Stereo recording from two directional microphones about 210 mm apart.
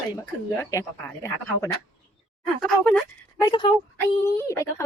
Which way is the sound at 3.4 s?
25° left (ahead or behind).